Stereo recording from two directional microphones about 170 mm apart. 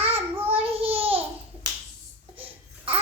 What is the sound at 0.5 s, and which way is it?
Child singing, 35° right (ahead or behind).